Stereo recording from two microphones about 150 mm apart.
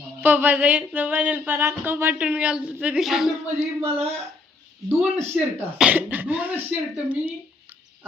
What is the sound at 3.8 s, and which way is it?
Speech, 40° right (ahead or behind).